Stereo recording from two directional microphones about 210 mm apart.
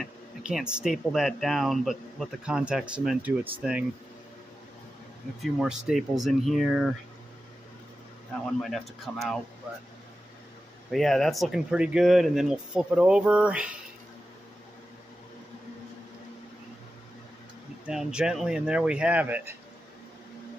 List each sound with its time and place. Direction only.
0.0 s speech: 5° right (ahead or behind)
5.4 s speech: centre (ahead or behind)
8.5 s speech: centre (ahead or behind)
10.9 s speech: centre (ahead or behind)
17.8 s speech: 5° right (ahead or behind)